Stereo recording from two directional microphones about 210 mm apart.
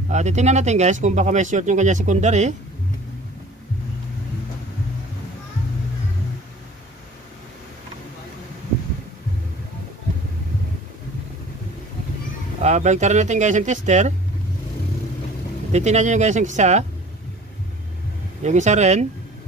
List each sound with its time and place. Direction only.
0.1 s speech: 35° right (ahead or behind)
12.6 s speech: 35° right (ahead or behind)
15.7 s speech: 35° right (ahead or behind)
18.4 s speech: 35° right (ahead or behind)